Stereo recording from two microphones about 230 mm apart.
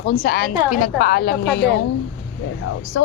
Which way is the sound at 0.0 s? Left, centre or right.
Left.